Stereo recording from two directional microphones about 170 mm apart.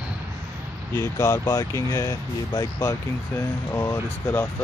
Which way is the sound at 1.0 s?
15° left (ahead or behind).